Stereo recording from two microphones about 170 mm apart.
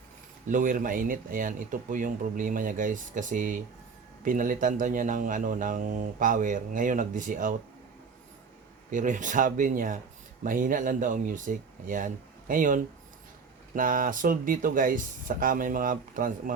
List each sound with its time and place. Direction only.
0.4 s speech: 50° right (ahead or behind)
8.9 s speech: 50° right (ahead or behind)